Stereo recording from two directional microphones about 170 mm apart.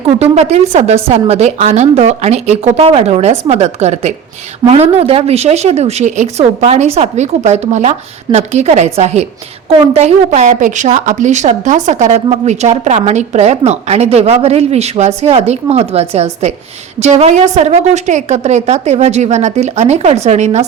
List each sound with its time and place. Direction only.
0.2 s a woman's voice: 40° right (ahead or behind)